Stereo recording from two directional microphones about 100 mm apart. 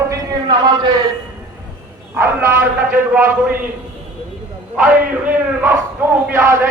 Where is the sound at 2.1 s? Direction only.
25° right (ahead or behind).